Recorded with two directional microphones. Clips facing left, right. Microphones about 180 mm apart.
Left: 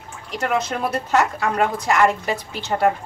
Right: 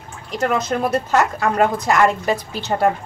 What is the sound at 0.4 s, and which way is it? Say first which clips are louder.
Speech: right 3 dB; 45° right (ahead or behind).